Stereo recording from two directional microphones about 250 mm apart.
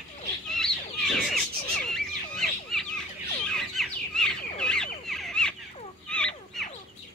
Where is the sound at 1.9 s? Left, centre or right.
Centre.